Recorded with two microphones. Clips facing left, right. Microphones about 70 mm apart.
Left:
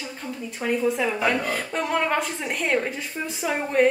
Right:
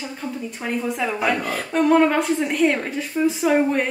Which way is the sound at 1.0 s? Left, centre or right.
Centre.